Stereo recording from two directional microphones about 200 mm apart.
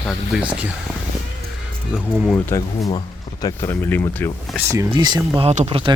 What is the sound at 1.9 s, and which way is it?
Speech, centre (ahead or behind).